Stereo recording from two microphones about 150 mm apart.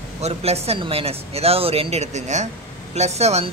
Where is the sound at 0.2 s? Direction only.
45° right (ahead or behind).